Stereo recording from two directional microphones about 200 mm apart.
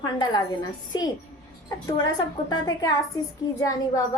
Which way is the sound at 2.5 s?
20° left (ahead or behind).